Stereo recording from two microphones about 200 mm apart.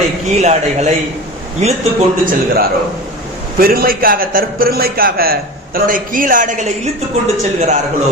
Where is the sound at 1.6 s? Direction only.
35° right (ahead or behind).